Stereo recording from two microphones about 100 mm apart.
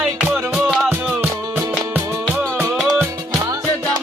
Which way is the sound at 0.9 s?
20° right (ahead or behind).